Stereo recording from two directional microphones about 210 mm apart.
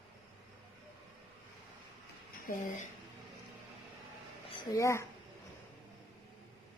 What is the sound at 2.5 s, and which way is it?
Speech, 40° left (ahead or behind).